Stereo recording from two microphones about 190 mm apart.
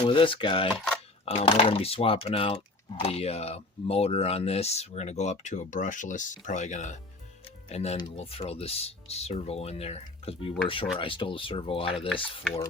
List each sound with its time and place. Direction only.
0.0 s speech: 25° left (ahead or behind)